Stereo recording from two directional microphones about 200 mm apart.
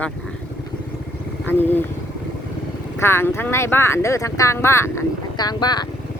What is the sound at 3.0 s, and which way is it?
Speech, 10° left (ahead or behind).